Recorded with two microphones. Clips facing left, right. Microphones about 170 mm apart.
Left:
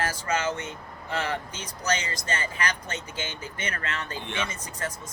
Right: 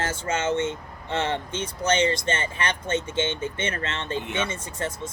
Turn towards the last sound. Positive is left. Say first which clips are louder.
# right 4 dB
turn(degrees=-25)  # may be behind; listen again after turning